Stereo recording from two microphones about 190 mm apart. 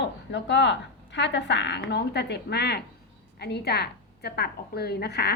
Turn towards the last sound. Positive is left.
turn(degrees=55)  # may be behind; listen again after turning